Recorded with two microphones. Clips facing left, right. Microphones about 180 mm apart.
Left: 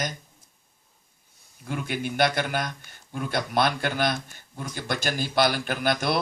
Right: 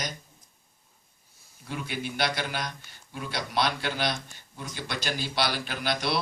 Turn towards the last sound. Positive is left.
turn(degrees=50)  # may be behind; listen again after turning